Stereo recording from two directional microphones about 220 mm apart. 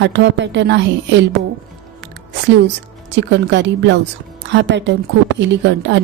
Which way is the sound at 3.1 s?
55° right (ahead or behind).